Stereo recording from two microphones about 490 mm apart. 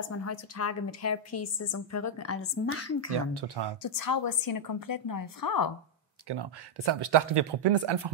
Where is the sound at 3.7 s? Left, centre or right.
Left.